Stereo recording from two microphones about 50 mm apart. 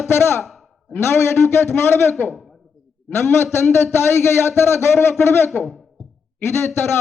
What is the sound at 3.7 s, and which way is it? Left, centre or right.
A man's voice, left.